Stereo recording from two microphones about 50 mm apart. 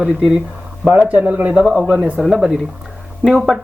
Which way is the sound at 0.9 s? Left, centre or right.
Right.